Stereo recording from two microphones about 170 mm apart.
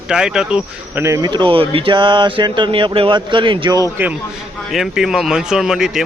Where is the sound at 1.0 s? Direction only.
15° right (ahead or behind).